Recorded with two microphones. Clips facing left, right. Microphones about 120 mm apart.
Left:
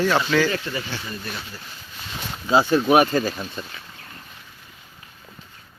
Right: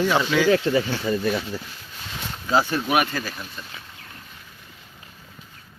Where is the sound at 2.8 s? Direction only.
30° left (ahead or behind).